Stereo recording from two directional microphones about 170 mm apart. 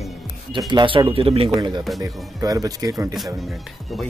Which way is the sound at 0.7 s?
30° right (ahead or behind).